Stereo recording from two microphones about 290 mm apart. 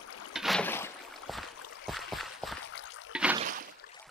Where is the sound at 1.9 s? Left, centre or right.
Centre.